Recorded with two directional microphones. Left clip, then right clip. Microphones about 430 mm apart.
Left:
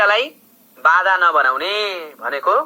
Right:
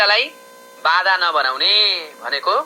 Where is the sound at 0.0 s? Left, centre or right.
Centre.